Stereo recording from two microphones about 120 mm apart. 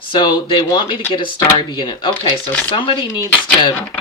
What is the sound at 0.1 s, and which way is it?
Speech, 40° left (ahead or behind).